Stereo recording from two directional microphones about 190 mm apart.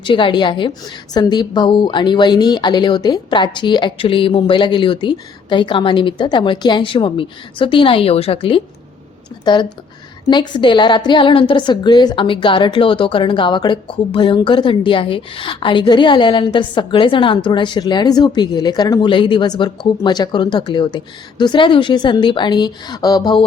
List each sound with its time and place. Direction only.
0.0 s a woman's voice: 25° left (ahead or behind)